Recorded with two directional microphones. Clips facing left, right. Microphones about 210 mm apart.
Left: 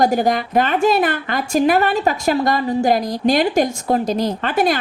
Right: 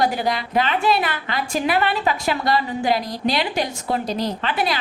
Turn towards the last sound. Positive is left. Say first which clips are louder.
# left 5 dB
turn(degrees=50)  # may be behind; listen again after turning